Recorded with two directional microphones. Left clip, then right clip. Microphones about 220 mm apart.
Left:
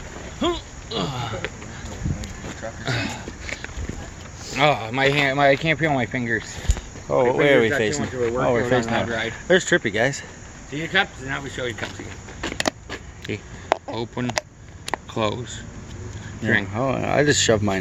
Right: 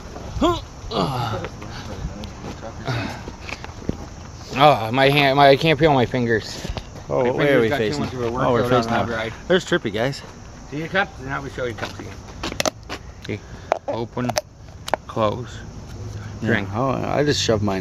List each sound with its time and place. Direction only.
0.3 s speech: 30° right (ahead or behind)
2.8 s a sound: centre (ahead or behind)
4.5 s speech: 35° right (ahead or behind)
7.1 s speech: 5° left (ahead or behind)
12.9 s a sound: centre (ahead or behind)
13.7 s speech: 5° right (ahead or behind)
16.4 s speech: 5° right (ahead or behind)